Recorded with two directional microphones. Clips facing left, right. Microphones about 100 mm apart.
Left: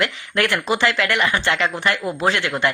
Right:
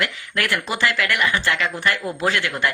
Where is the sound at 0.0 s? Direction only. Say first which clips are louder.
Left 4 dB; 25° left (ahead or behind).